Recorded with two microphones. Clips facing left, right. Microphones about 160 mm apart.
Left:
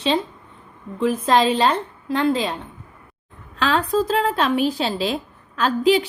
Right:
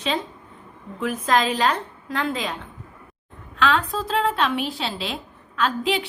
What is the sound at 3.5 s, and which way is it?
A woman's voice, 35° left (ahead or behind).